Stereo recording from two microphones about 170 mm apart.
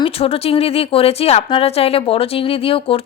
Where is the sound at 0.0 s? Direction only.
35° left (ahead or behind).